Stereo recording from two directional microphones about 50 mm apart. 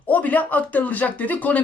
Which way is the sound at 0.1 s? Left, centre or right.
Left.